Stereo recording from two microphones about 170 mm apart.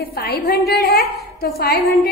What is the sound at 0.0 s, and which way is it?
A woman's voice, 65° left (ahead or behind).